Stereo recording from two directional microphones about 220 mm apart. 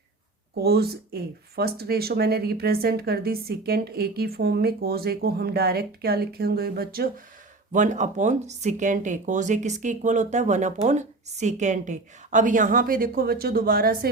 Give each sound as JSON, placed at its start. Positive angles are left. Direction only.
{"t": 0.6, "sound": "speech", "side_deg": -45}
{"t": 7.7, "sound": "speech", "side_deg": -35}